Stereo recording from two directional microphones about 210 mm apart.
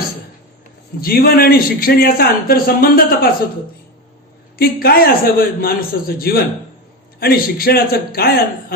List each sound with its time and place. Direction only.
1.0 s a man's voice: 45° left (ahead or behind)
4.5 s a man's voice: 45° left (ahead or behind)